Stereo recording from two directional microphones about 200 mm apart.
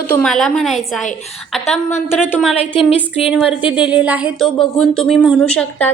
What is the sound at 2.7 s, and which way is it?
Speech, 30° left (ahead or behind).